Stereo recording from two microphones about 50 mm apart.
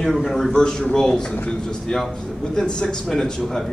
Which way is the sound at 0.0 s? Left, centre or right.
Centre.